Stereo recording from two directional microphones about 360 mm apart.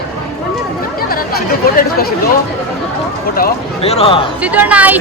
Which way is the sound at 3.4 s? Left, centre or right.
Left.